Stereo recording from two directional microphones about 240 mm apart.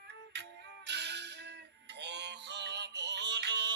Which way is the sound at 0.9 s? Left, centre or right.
Right.